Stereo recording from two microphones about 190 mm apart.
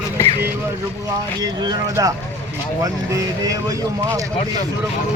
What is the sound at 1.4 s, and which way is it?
Speech, 20° right (ahead or behind).